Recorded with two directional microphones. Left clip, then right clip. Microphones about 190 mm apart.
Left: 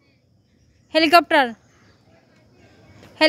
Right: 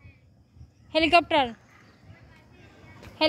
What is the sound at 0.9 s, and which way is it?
Speech, 30° left (ahead or behind).